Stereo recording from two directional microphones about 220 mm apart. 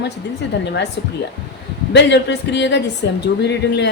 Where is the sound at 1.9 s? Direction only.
50° left (ahead or behind).